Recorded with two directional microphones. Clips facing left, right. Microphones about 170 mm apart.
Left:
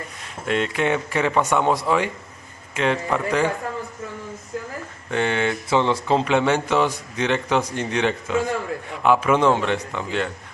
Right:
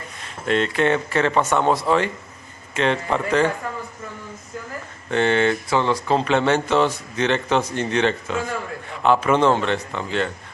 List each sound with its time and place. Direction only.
0.4 s speech: 10° left (ahead or behind)
5.1 s speech: 10° left (ahead or behind)
5.7 s speech: 20° left (ahead or behind)